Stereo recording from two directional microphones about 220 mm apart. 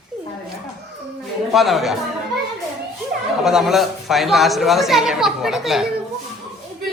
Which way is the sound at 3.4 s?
Centre (ahead or behind).